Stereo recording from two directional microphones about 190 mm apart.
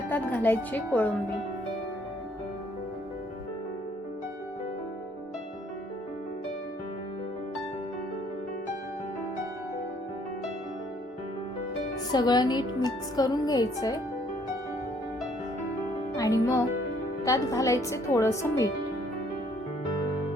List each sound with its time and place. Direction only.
0.1 s a woman's voice: 10° left (ahead or behind)
12.1 s speech: 20° left (ahead or behind)
16.1 s a woman's voice: 20° left (ahead or behind)